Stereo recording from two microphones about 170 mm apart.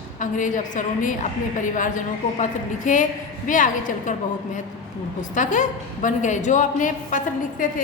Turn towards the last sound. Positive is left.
turn(degrees=50)  # may be behind; listen again after turning